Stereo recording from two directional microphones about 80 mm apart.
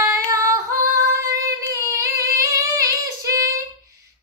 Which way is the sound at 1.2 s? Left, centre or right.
Right.